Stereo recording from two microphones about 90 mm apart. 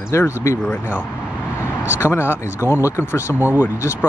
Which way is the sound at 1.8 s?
25° left (ahead or behind).